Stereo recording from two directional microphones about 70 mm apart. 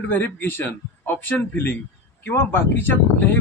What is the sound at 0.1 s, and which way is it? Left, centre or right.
Speech, left.